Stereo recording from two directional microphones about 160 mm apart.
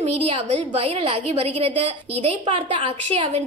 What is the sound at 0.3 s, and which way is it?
A woman's voice, 40° right (ahead or behind).